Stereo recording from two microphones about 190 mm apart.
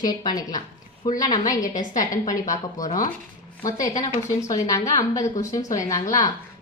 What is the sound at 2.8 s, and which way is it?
Speech, 20° left (ahead or behind).